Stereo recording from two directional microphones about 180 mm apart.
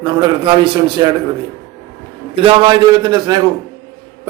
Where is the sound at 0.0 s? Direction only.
25° right (ahead or behind).